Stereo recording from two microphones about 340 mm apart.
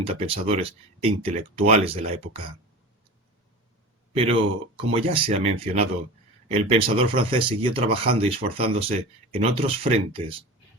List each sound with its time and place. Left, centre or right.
0.0 s speech: centre
4.1 s speech: centre